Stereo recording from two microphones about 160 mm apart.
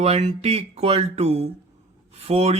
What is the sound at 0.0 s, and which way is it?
Speech, 45° right (ahead or behind).